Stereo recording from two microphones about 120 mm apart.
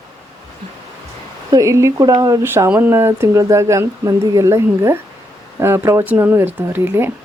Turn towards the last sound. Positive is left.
turn(degrees=-20)  # may be behind; listen again after turning